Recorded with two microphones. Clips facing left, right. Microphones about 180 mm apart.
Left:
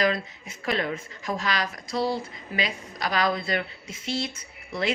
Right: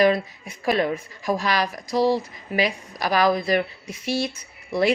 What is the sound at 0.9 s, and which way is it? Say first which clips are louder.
Speech: right 4 dB; 25° left (ahead or behind).